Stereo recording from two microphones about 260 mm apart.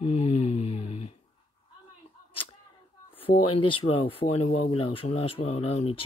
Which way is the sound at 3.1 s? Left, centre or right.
Left.